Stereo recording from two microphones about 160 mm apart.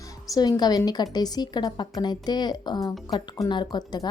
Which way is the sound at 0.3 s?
25° left (ahead or behind).